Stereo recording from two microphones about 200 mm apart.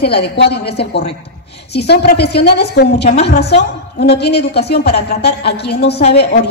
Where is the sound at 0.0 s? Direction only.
55° left (ahead or behind).